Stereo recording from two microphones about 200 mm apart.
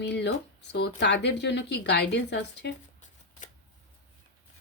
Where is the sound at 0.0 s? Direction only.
55° left (ahead or behind).